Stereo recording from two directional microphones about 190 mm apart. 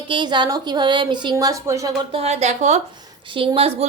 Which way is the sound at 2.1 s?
35° right (ahead or behind).